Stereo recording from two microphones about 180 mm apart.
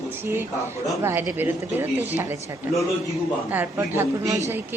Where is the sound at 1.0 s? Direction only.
15° right (ahead or behind).